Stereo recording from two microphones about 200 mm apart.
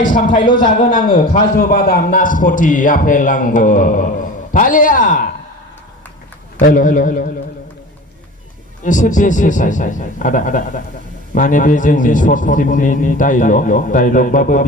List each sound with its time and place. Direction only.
0.0 s a man's voice: 40° left (ahead or behind)
6.6 s a man's voice: 40° left (ahead or behind)
8.8 s a man's voice: 40° left (ahead or behind)